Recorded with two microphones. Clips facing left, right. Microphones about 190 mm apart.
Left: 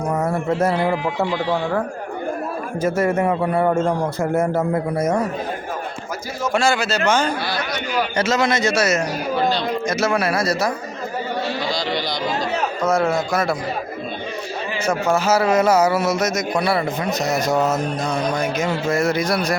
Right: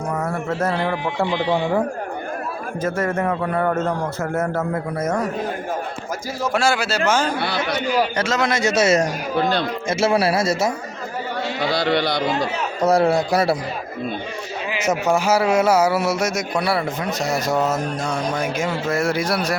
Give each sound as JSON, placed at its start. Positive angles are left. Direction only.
{"t": 0.6, "sound": "a man's voice", "side_deg": 10}
{"t": 1.3, "sound": "a man's voice", "side_deg": -20}
{"t": 2.8, "sound": "a man's voice", "side_deg": 10}
{"t": 6.5, "sound": "speech", "side_deg": -5}
{"t": 7.9, "sound": "a sound", "side_deg": 0}
{"t": 8.6, "sound": "a man's voice", "side_deg": -25}
{"t": 9.0, "sound": "speech", "side_deg": -55}
{"t": 9.8, "sound": "a man's voice", "side_deg": -30}
{"t": 11.6, "sound": "a sound", "side_deg": -60}
{"t": 12.8, "sound": "a man's voice", "side_deg": -35}
{"t": 14.8, "sound": "speech", "side_deg": -15}
{"t": 17.4, "sound": "a sound", "side_deg": -5}
{"t": 18.5, "sound": "speech", "side_deg": -5}